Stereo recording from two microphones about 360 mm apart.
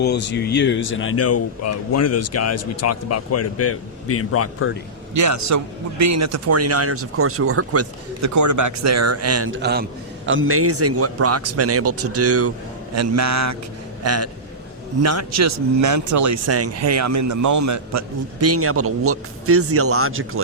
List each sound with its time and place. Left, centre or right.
0.0 s speech: left
5.1 s a man's voice: right